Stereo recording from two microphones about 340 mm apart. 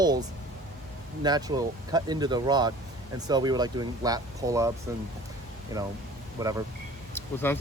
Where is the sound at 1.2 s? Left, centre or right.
Centre.